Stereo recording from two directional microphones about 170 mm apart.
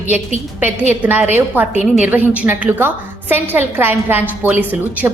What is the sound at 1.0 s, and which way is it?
A woman's voice, 5° right (ahead or behind).